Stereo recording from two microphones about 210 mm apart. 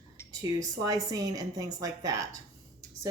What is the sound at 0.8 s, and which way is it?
Speech, 15° right (ahead or behind).